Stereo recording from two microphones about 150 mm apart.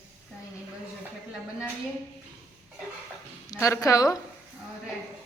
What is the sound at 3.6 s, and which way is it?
Speech, 20° left (ahead or behind).